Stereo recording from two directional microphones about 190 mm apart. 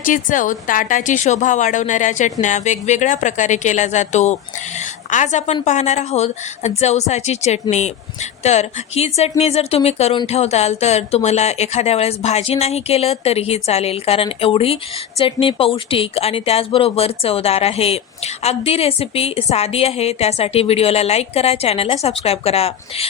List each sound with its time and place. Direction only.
0.0 s speech: 45° left (ahead or behind)
4.8 s a sound: 40° left (ahead or behind)
5.6 s speech: 35° left (ahead or behind)